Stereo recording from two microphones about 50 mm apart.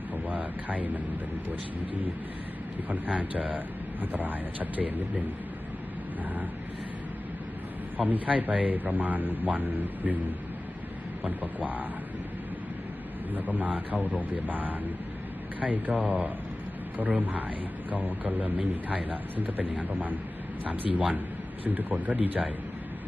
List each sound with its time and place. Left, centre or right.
0.1 s a sound: right
3.2 s a man's voice: right
7.9 s a man's voice: right
11.2 s a man's voice: right
13.3 s a man's voice: right